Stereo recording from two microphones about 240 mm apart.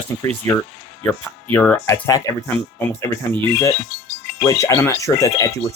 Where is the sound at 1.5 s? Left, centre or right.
Centre.